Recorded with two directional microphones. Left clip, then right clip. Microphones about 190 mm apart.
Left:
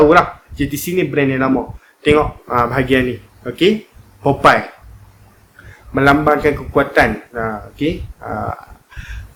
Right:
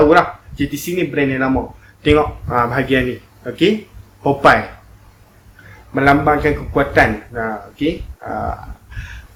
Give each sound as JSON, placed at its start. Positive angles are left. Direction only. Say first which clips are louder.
{"t": 0.1, "sound": "a man's voice", "louder": "left 1 dB", "side_deg": 55}
{"t": 5.9, "sound": "a man's voice", "louder": "left 1 dB", "side_deg": 50}